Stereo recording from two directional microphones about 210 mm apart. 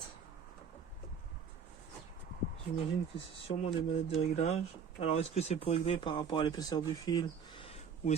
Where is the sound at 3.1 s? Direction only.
25° left (ahead or behind).